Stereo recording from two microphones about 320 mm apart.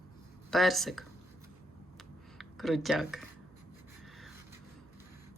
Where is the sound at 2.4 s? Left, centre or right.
Centre.